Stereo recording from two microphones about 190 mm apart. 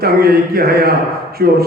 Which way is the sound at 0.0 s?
55° right (ahead or behind).